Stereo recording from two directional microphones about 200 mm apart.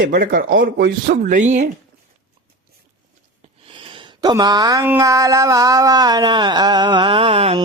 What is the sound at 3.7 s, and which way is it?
Speech, 25° right (ahead or behind).